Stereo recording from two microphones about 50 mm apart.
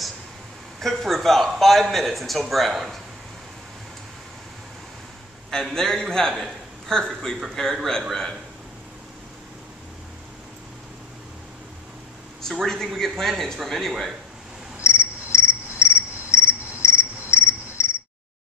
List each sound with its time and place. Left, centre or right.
0.7 s speech: centre
5.5 s a man's voice: centre
12.6 s speech: centre
14.8 s cricket: left